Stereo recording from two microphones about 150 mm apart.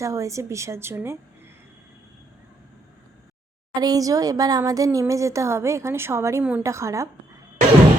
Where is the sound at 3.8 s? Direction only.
25° right (ahead or behind).